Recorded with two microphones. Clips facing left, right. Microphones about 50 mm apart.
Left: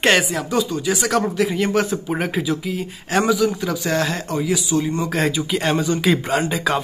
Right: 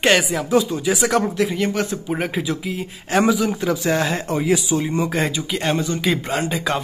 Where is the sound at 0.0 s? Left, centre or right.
Centre.